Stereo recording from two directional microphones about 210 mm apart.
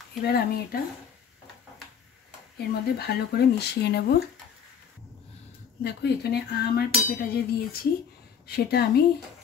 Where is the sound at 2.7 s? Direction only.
50° left (ahead or behind).